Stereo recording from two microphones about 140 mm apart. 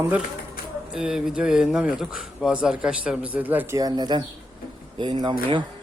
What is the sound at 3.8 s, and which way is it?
A man's voice, 30° right (ahead or behind).